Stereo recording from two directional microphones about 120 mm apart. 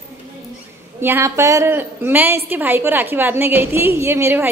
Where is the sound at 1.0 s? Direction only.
20° right (ahead or behind).